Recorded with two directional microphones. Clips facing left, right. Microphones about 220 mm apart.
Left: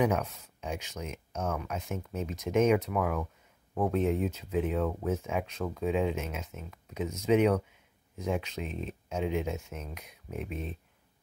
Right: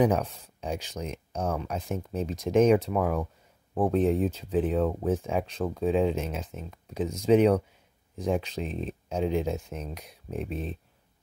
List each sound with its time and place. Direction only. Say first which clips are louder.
0.0 s speech: right 4 dB; 35° right (ahead or behind)